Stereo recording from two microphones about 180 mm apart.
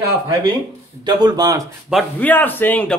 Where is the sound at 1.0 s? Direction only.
25° right (ahead or behind).